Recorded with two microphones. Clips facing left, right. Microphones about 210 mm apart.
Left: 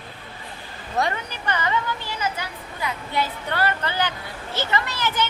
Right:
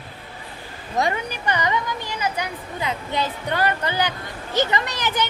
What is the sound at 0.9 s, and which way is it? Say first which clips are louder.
Speech: right 2 dB; 15° right (ahead or behind).